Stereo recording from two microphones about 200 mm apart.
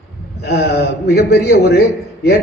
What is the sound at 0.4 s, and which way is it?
A man's voice, 55° left (ahead or behind).